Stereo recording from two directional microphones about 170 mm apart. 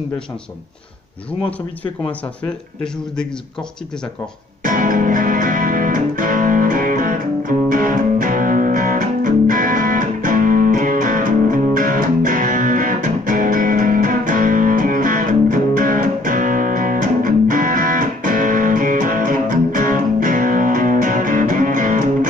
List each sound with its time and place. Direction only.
2.4 s speech: 5° left (ahead or behind)
4.6 s music: 55° right (ahead or behind)